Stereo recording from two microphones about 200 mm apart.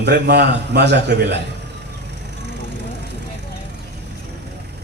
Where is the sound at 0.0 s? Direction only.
55° right (ahead or behind).